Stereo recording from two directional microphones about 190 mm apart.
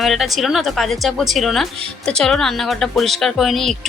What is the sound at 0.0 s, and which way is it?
A woman's voice, centre (ahead or behind).